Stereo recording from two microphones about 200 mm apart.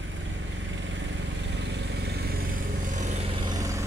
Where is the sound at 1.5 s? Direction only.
60° right (ahead or behind).